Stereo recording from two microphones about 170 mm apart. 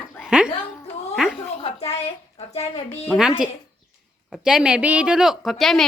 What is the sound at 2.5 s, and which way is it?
Speech, 40° left (ahead or behind).